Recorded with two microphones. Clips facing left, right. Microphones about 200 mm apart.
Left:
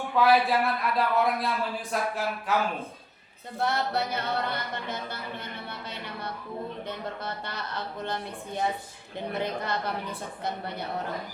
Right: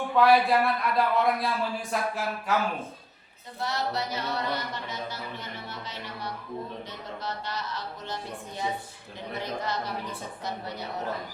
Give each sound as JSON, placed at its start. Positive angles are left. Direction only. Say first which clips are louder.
{"t": 0.2, "sound": "speech", "louder": "right 1 dB", "side_deg": 0}
{"t": 3.6, "sound": "music", "louder": "left 3 dB", "side_deg": 55}